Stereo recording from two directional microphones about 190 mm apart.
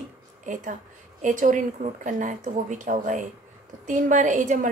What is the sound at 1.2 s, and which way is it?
A woman's voice, 45° right (ahead or behind).